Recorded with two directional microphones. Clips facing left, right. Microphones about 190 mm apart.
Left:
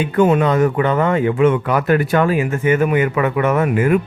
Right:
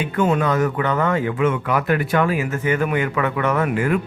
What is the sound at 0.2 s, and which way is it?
Speech, 25° left (ahead or behind).